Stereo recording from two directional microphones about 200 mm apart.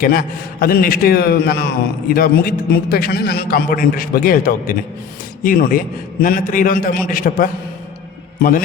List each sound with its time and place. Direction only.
0.0 s a man's voice: 45° left (ahead or behind)